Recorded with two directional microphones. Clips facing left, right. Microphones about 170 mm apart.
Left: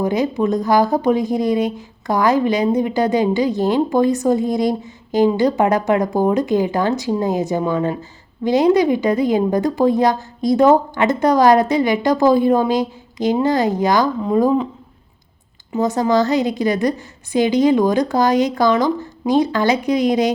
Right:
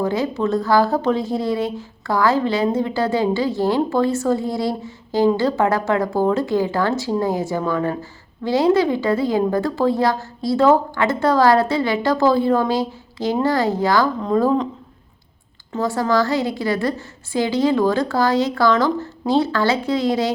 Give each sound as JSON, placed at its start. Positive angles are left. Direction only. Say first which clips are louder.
{"t": 0.0, "sound": "a woman's voice", "louder": "left 2 dB", "side_deg": 15}
{"t": 15.7, "sound": "a woman's voice", "louder": "left 3 dB", "side_deg": 20}